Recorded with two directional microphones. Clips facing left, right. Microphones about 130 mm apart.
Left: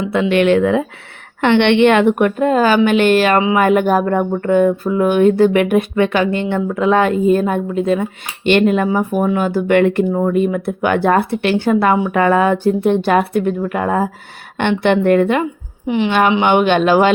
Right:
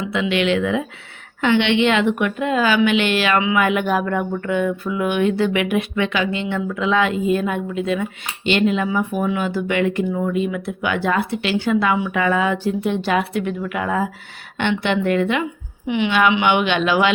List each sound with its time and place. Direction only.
0.1 s a woman's voice: 50° left (ahead or behind)
1.4 s a woman's voice: 60° left (ahead or behind); by 8.0 s 40° left (ahead or behind)
8.4 s a woman's voice: 50° left (ahead or behind)